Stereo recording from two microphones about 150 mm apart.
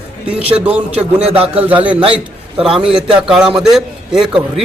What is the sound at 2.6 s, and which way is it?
A man's voice, 5° right (ahead or behind).